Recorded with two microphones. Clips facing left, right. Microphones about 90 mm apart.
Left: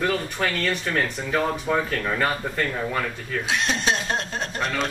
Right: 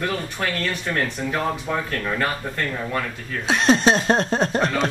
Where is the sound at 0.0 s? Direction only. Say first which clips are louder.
Left 1 dB; centre (ahead or behind).